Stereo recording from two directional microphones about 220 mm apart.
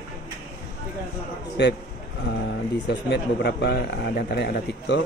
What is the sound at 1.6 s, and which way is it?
Speech, 50° left (ahead or behind).